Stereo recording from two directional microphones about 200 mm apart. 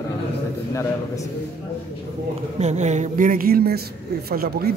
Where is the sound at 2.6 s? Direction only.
35° right (ahead or behind).